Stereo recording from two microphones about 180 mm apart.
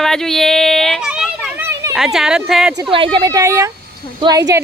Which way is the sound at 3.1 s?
20° right (ahead or behind).